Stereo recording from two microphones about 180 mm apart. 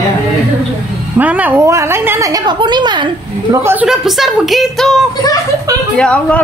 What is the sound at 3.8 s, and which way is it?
A man's voice, centre (ahead or behind).